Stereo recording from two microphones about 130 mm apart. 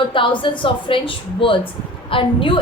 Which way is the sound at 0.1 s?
40° left (ahead or behind).